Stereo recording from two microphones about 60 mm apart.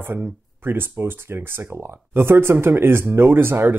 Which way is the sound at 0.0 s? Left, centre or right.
Right.